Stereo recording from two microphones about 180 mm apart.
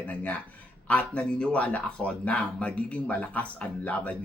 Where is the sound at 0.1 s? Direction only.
10° left (ahead or behind).